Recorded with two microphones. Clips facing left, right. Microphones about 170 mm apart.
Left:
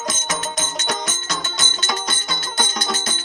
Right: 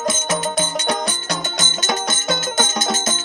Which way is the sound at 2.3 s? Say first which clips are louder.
Right 7 dB; 45° right (ahead or behind).